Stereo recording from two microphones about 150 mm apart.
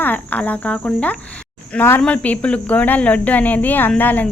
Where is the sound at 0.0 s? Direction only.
10° left (ahead or behind).